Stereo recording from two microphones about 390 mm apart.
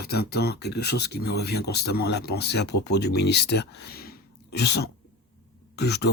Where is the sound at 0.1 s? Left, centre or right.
Left.